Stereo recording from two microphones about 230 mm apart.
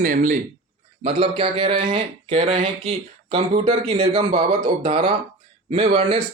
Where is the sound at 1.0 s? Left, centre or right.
Right.